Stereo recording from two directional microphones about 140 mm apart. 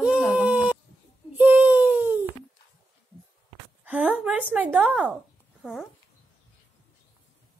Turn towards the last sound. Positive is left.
turn(degrees=0)  # may be behind; listen again after turning